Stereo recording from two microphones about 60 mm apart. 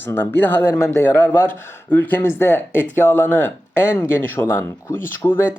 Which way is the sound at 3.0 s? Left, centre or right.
Left.